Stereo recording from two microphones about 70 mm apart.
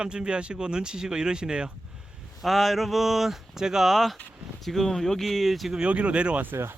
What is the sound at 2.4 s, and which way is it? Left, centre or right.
Speech, centre.